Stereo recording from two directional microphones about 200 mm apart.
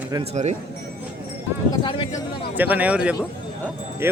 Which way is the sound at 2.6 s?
10° right (ahead or behind).